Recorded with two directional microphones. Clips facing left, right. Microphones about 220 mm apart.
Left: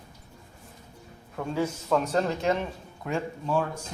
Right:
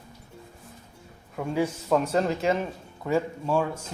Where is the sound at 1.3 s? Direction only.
10° right (ahead or behind).